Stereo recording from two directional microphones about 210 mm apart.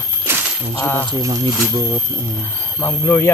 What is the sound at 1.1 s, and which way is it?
Speech, 15° right (ahead or behind).